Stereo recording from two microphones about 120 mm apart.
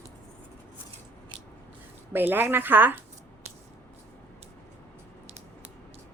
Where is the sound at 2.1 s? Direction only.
15° right (ahead or behind).